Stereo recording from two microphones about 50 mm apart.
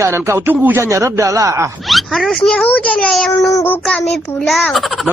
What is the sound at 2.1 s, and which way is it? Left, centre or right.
Speech, centre.